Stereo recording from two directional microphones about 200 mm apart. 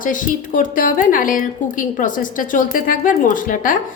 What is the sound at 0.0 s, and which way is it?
A woman's voice, 40° left (ahead or behind).